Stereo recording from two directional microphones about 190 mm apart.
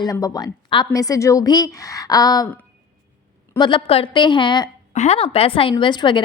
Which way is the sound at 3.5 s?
25° left (ahead or behind).